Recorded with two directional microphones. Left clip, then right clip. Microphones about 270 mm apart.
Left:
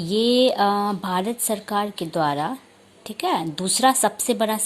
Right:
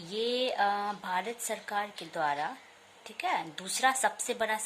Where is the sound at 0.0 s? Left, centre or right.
Centre.